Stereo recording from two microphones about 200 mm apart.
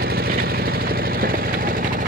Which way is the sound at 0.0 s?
50° right (ahead or behind).